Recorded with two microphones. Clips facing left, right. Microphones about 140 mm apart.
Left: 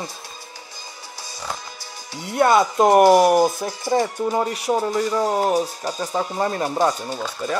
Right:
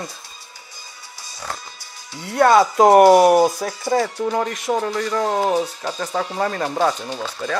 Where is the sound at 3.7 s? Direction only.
15° left (ahead or behind).